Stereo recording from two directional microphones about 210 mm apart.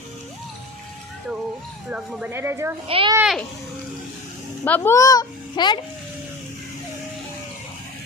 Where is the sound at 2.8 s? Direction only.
25° right (ahead or behind).